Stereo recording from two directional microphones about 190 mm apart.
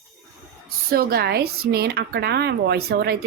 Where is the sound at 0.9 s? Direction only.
55° right (ahead or behind).